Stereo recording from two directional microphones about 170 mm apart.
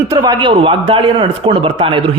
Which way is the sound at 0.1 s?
25° right (ahead or behind).